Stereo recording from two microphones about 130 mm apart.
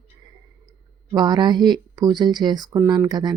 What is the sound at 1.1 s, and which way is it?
Speech, 35° right (ahead or behind).